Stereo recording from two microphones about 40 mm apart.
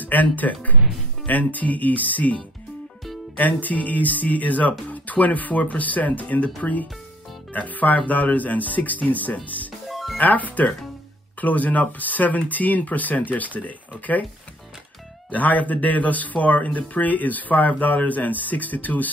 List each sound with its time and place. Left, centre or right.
0.0 s speech: left
9.8 s music: centre
10.1 s speech: left
15.3 s speech: left